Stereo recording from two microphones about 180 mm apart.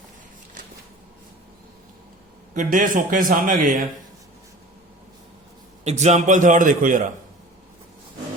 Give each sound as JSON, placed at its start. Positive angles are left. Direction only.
{"t": 2.6, "sound": "a man's voice", "side_deg": -50}
{"t": 5.8, "sound": "a man's voice", "side_deg": -40}